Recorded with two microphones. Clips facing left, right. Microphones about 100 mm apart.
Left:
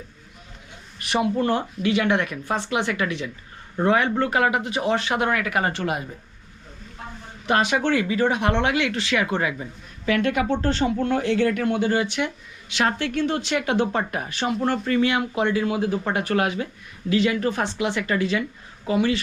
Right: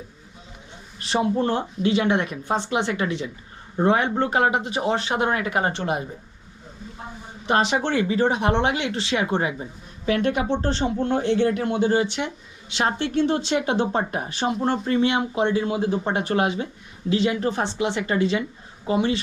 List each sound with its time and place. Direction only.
1.1 s speech: 25° right (ahead or behind)